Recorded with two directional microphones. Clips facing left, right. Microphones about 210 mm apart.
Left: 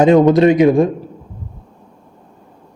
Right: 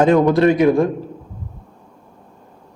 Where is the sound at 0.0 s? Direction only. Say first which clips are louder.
Left 3 dB; 20° left (ahead or behind).